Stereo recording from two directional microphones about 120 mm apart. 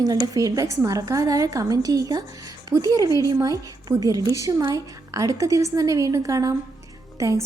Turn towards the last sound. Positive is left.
turn(degrees=-25)  # may be behind; listen again after turning